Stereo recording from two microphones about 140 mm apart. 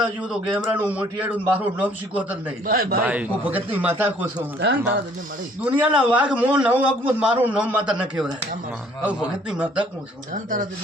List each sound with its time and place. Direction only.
0.0 s a man's voice: 5° right (ahead or behind)
2.6 s a man's voice: 90° right
3.0 s a man's voice: 10° right (ahead or behind)
10.3 s speech: 70° right (ahead or behind)